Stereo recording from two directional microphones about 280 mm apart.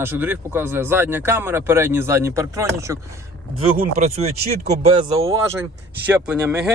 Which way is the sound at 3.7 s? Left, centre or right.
Right.